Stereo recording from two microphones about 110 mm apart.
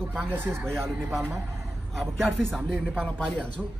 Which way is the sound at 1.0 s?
5° left (ahead or behind).